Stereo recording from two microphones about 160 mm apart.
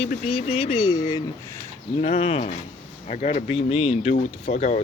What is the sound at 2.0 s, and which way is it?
Speech, 40° left (ahead or behind).